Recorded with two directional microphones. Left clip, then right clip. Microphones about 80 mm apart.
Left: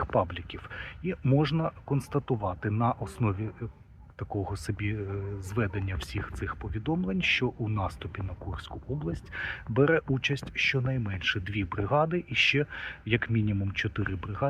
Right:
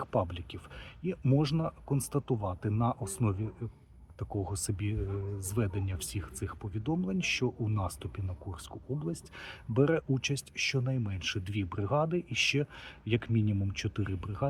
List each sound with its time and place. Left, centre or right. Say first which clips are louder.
0.0 s speech: left 5 dB; right